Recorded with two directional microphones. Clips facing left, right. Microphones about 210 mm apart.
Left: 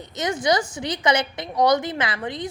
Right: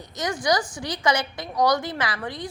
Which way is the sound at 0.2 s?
25° left (ahead or behind).